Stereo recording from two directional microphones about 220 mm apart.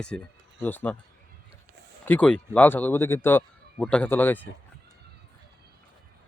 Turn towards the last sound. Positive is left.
turn(degrees=10)  # may be behind; listen again after turning